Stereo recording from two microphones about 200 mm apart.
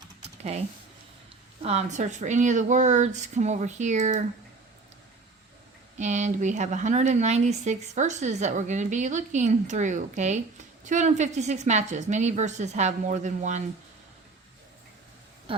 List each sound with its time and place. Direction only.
1.6 s speech: 35° right (ahead or behind)
6.0 s speech: 35° right (ahead or behind)
15.5 s speech: 25° right (ahead or behind)